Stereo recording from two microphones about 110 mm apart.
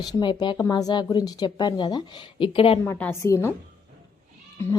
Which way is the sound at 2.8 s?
20° left (ahead or behind).